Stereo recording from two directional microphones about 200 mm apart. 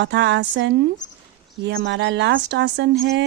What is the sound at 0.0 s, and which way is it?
Speech, 60° right (ahead or behind).